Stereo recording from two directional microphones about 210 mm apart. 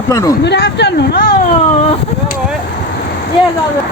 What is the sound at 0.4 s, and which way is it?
Speech, 55° left (ahead or behind).